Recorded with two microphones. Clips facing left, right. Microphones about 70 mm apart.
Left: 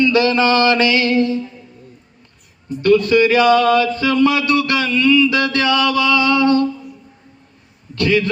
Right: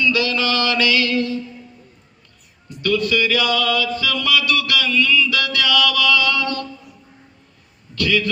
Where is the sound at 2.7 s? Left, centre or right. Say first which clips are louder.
Left 7 dB; left.